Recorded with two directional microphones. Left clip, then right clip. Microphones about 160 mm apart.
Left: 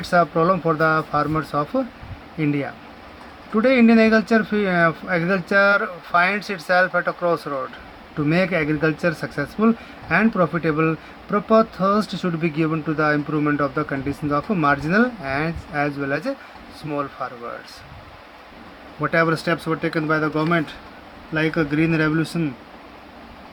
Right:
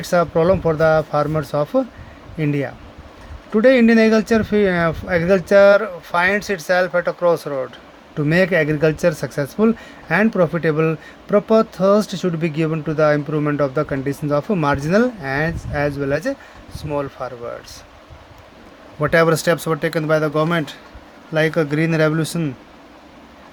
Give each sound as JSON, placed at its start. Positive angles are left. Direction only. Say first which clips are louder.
{"t": 0.0, "sound": "speech", "louder": "right 1 dB", "side_deg": -55}
{"t": 19.0, "sound": "speech", "louder": "right 4 dB", "side_deg": -75}